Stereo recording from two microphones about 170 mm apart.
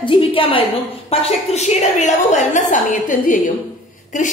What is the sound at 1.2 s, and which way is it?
A woman's voice, 40° left (ahead or behind).